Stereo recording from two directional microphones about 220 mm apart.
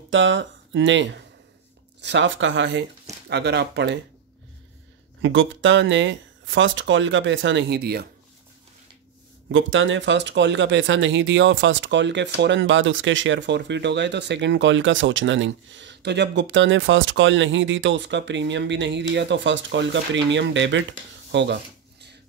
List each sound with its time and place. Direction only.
0.1 s speech: 55° right (ahead or behind)
5.2 s speech: 60° right (ahead or behind)
9.5 s speech: 60° right (ahead or behind)